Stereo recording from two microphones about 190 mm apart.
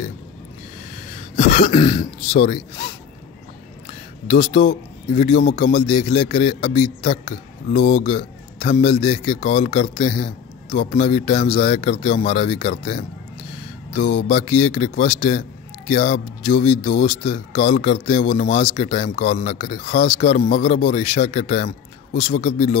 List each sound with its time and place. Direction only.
1.7 s throat clearing: 25° left (ahead or behind)
2.3 s speech: 35° left (ahead or behind)
4.3 s speech: 35° left (ahead or behind)
22.1 s speech: 50° left (ahead or behind)